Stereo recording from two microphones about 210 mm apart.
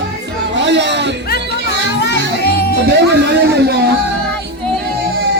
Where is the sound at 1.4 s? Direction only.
55° right (ahead or behind).